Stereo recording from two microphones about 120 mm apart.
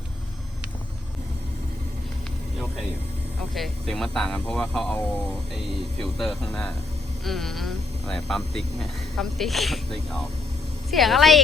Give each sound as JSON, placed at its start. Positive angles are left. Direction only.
{"t": 3.5, "sound": "speech", "side_deg": 0}